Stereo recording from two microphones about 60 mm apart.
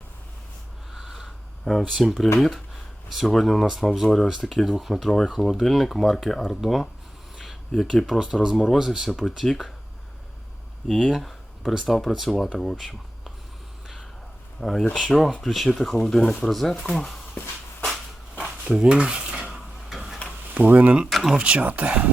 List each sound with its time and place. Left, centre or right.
0.9 s a sound: centre
1.8 s speech: centre
10.8 s speech: centre
11.1 s a sound: centre
11.9 s speech: centre
14.6 s speech: centre
17.3 s shuffle: left
18.7 s stir: centre
19.5 s a sound: centre
20.5 s speech: right
21.1 s speech: centre
21.3 s speech: centre